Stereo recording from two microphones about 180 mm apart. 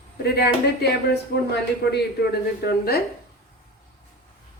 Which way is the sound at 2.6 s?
60° left (ahead or behind).